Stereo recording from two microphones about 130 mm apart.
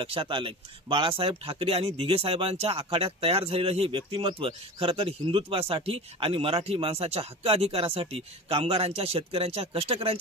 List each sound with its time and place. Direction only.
0.0 s speech: 45° right (ahead or behind)